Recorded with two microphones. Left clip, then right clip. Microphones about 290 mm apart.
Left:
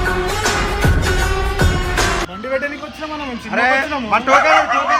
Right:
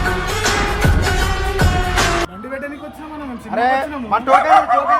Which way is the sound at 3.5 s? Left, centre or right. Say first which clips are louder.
Left 1 dB; centre.